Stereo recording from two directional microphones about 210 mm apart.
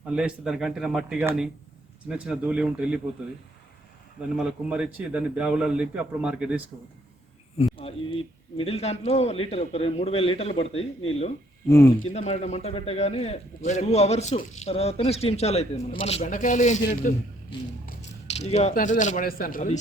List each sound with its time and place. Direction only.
0.1 s a man's voice: 5° right (ahead or behind)
4.4 s a man's voice: 5° right (ahead or behind)
7.6 s speech: 25° left (ahead or behind)
11.9 s a man's voice: 30° left (ahead or behind)
18.4 s a man's voice: 30° left (ahead or behind)